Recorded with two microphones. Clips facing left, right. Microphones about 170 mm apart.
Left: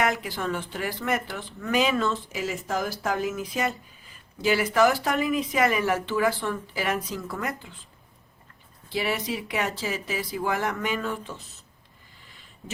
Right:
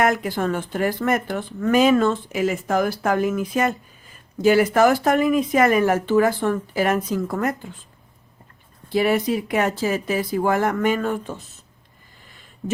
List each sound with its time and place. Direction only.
0.0 s speech: 50° right (ahead or behind)
8.9 s speech: 50° right (ahead or behind)